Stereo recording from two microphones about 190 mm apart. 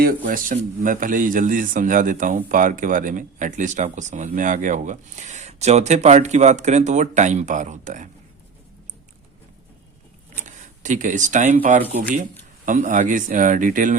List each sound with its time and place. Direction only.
0.0 s speech: 50° right (ahead or behind)
10.4 s speech: 40° right (ahead or behind)